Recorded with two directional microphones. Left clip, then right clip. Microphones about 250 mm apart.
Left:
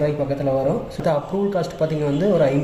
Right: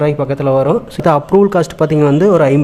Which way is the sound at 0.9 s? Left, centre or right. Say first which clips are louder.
Right 9 dB; right.